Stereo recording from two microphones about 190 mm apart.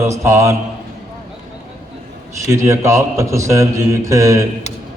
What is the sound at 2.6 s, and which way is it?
A man's voice, 15° right (ahead or behind).